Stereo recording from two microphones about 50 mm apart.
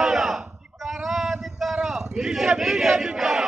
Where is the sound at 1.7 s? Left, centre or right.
Centre.